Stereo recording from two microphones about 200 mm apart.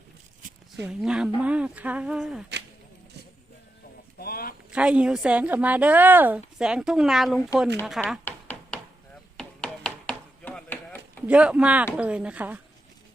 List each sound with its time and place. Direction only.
0.9 s a woman's voice: 5° right (ahead or behind)
4.2 s a sound: 50° left (ahead or behind)
4.7 s a woman's voice: 5° right (ahead or behind)
8.2 s a sound: 5° left (ahead or behind)
9.4 s chopping: 5° left (ahead or behind)
11.3 s a woman's voice: 5° right (ahead or behind)